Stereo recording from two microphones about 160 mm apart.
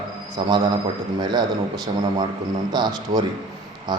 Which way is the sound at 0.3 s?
25° right (ahead or behind).